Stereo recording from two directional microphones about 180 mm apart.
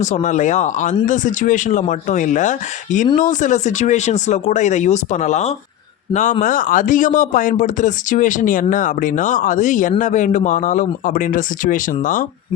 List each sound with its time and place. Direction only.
0.0 s speech: 40° left (ahead or behind)